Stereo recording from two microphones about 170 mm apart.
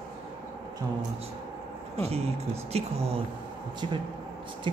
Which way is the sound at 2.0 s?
35° right (ahead or behind).